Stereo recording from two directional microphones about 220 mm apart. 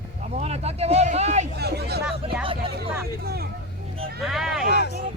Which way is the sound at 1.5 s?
45° right (ahead or behind).